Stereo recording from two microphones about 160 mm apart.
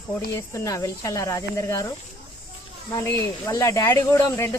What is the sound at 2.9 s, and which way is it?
Speech, 20° left (ahead or behind).